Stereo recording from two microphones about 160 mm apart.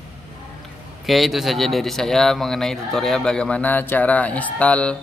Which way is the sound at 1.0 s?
Centre (ahead or behind).